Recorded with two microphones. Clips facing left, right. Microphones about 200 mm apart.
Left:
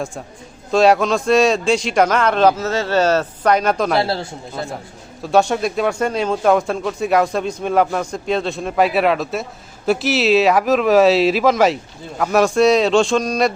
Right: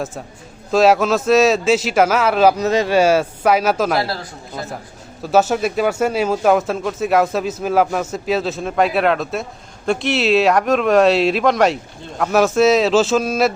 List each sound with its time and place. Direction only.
0.7 s speech: centre (ahead or behind)
4.0 s speech: 25° left (ahead or behind)
5.2 s speech: 5° right (ahead or behind)